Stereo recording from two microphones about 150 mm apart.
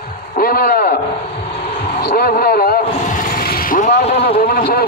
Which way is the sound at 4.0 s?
45° left (ahead or behind).